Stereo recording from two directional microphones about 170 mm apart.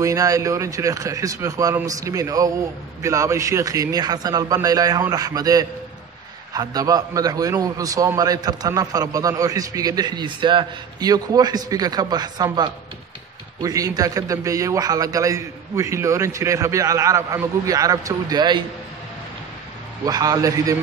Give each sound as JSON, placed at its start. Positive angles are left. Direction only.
{"t": 0.0, "sound": "a man's voice", "side_deg": -20}
{"t": 20.1, "sound": "a man's voice", "side_deg": -20}